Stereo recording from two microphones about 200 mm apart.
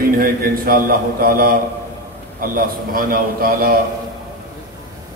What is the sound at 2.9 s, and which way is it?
Speech, 45° right (ahead or behind).